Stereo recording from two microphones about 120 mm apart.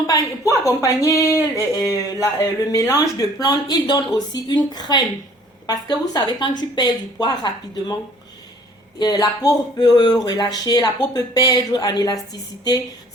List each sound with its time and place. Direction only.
0.1 s speech: 25° left (ahead or behind)
9.0 s speech: 35° left (ahead or behind)